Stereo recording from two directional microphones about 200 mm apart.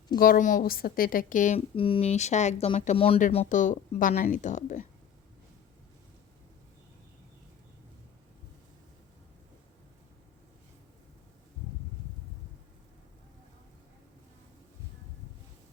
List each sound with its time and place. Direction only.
0.2 s a woman's voice: 45° left (ahead or behind)
1.7 s a woman's voice: 25° left (ahead or behind)
3.2 s a woman's voice: 40° left (ahead or behind)